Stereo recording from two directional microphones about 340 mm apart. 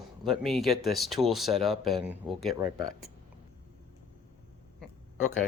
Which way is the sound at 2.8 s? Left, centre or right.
Left.